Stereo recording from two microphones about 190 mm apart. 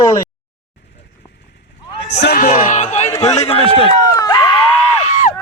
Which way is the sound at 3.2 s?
30° left (ahead or behind).